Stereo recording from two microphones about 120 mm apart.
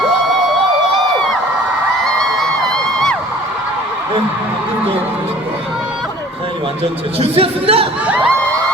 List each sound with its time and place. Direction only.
2.0 s music: 5° left (ahead or behind)
7.2 s speech: 55° right (ahead or behind)